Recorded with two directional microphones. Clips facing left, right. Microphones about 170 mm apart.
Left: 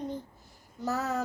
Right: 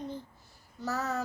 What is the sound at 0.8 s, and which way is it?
Speech, 20° left (ahead or behind).